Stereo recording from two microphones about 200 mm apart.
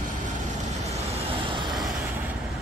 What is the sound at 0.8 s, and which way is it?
Vehicle, 30° right (ahead or behind).